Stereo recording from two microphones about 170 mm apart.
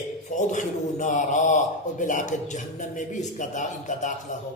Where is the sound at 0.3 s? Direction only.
45° left (ahead or behind).